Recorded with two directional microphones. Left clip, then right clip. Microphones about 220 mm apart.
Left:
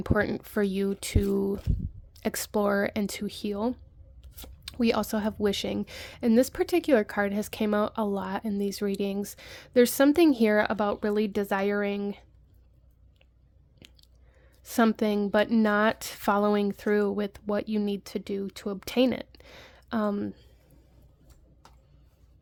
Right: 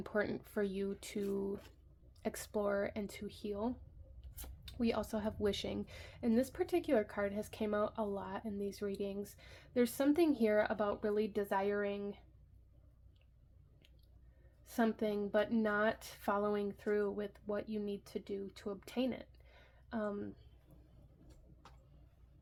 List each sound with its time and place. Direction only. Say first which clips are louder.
0.0 s speech: left 10 dB; 40° left (ahead or behind)
13.7 s chewing: left 16 dB; 55° left (ahead or behind)
14.6 s speech: left 11 dB; 50° left (ahead or behind)